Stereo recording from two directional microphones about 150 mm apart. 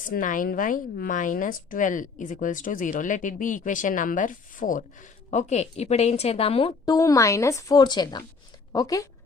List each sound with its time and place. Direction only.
0.0 s a woman's voice: 65° left (ahead or behind); by 6.9 s 35° left (ahead or behind)
6.9 s speech: 25° left (ahead or behind)